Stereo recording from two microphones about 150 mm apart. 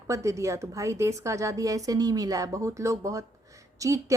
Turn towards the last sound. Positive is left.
turn(degrees=-20)  # may be behind; listen again after turning